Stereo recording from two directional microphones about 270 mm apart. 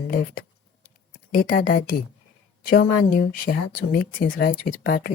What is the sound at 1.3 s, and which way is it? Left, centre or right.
Speech, left.